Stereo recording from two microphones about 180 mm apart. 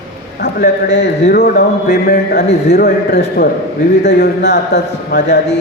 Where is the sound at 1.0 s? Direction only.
65° left (ahead or behind).